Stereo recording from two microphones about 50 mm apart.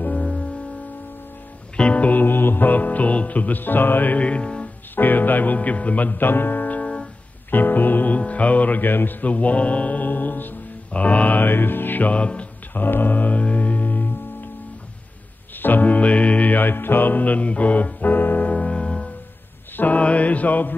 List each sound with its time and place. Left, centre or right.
0.0 s music: left
1.8 s music: left
2.2 s music: left
4.9 s speech: left
7.5 s music: left
10.9 s music: left
12.1 s music: left
12.7 s music: left
15.5 s music: left
18.5 s music: left